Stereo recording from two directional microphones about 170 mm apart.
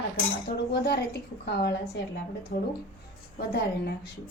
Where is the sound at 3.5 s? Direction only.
75° left (ahead or behind).